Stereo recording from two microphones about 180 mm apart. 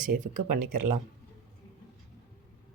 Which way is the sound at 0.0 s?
45° right (ahead or behind).